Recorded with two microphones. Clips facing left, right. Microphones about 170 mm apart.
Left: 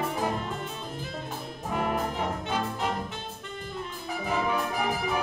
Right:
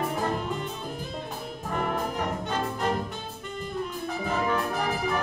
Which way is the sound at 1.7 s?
5° left (ahead or behind).